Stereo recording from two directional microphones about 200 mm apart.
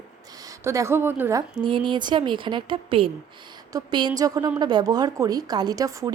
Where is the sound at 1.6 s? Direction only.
25° right (ahead or behind).